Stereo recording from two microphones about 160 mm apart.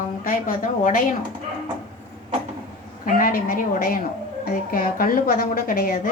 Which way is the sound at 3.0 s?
60° left (ahead or behind).